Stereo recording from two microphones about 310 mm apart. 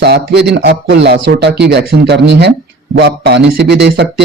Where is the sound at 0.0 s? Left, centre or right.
Right.